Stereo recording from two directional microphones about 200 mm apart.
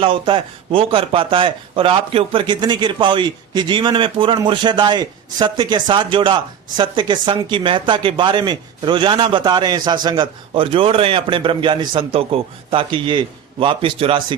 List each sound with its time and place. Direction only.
0.0 s a man's voice: 25° right (ahead or behind)